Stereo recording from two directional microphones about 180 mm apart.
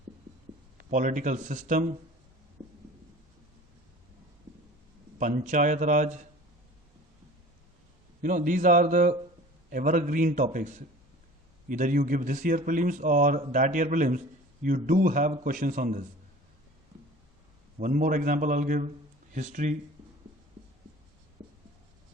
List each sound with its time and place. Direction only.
0.8 s a man's voice: 45° right (ahead or behind)
5.2 s a man's voice: 45° right (ahead or behind)
8.2 s a man's voice: 50° right (ahead or behind)
17.7 s a man's voice: 50° right (ahead or behind)